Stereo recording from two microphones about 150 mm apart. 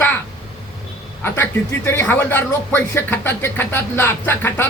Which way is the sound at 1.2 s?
15° left (ahead or behind).